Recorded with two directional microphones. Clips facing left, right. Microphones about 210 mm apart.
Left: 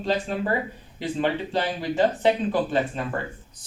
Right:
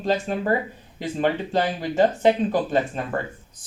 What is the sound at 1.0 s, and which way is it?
Speech, 45° right (ahead or behind).